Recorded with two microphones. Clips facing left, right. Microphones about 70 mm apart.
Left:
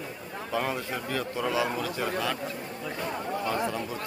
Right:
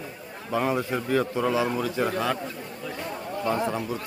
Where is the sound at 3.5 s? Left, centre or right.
Centre.